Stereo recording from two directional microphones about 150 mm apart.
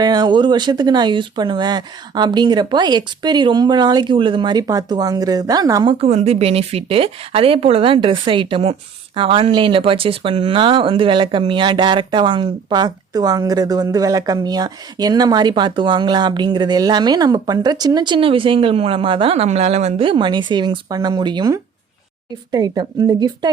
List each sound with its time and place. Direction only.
0.0 s speech: 30° right (ahead or behind)